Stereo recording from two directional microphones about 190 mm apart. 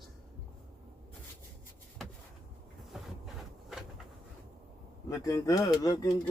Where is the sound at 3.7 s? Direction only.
Centre (ahead or behind).